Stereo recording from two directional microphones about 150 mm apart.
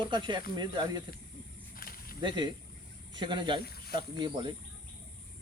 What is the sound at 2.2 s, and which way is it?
Speech, 30° right (ahead or behind).